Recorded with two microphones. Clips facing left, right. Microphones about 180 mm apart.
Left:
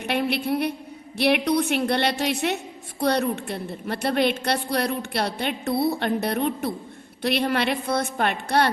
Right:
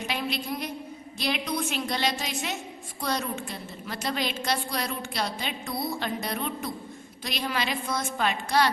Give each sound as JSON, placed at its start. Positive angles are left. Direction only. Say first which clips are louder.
{"t": 0.0, "sound": "a woman's voice", "louder": "left 7 dB", "side_deg": 60}